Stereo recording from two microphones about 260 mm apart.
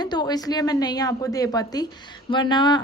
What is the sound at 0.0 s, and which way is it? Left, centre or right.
A woman's voice, centre.